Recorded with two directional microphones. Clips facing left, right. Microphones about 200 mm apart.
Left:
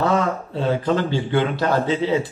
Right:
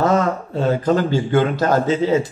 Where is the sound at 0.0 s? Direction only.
45° right (ahead or behind).